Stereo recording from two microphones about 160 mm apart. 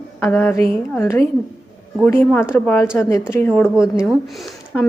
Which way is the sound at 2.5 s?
15° left (ahead or behind).